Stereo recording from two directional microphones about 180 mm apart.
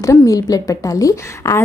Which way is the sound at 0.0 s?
20° left (ahead or behind).